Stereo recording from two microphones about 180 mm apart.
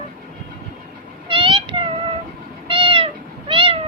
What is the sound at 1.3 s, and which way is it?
Meow, 30° right (ahead or behind).